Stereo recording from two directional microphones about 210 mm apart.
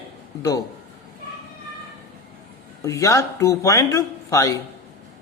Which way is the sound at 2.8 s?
15° left (ahead or behind).